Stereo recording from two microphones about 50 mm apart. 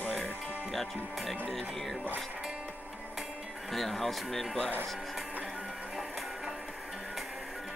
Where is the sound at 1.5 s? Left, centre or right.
Centre.